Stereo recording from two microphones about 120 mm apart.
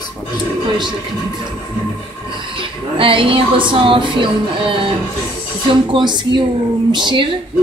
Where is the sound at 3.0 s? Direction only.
45° right (ahead or behind).